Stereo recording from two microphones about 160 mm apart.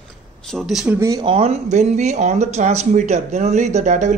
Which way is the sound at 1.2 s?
40° right (ahead or behind).